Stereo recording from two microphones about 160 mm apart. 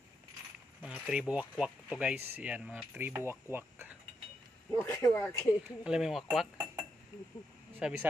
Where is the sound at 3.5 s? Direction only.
15° right (ahead or behind).